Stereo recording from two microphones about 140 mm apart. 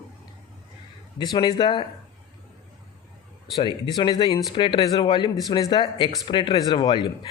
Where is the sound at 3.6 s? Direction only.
35° left (ahead or behind).